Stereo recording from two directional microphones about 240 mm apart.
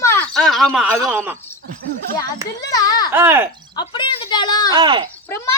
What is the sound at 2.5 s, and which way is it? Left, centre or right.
Speech, centre.